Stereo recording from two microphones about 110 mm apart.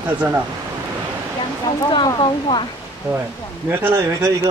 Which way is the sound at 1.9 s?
40° left (ahead or behind).